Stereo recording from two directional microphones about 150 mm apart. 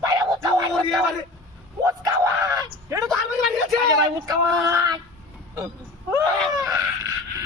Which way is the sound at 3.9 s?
25° right (ahead or behind).